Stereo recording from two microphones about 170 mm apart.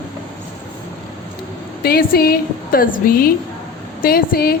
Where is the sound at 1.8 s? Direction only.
65° left (ahead or behind).